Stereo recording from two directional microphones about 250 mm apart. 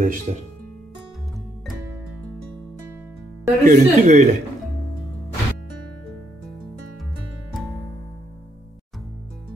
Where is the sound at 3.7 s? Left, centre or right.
Right.